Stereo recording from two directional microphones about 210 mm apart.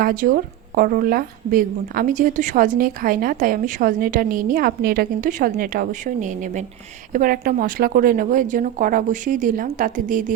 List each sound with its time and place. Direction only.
0.0 s a woman's voice: 40° right (ahead or behind)